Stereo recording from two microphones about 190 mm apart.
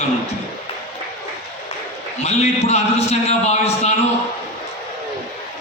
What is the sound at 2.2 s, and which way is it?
A man's voice, 35° left (ahead or behind).